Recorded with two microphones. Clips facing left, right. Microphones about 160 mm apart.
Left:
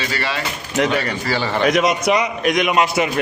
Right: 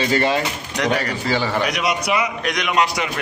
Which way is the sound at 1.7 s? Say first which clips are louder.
Left 5 dB; 45° left (ahead or behind).